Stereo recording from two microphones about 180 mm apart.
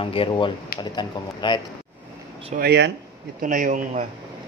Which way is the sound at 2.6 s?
70° right (ahead or behind).